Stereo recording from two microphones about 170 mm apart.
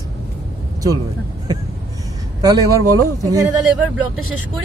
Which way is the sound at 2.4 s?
20° right (ahead or behind).